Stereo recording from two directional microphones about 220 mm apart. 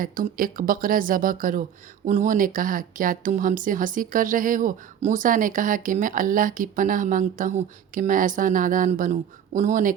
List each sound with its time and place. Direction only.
0.0 s speech: 40° right (ahead or behind)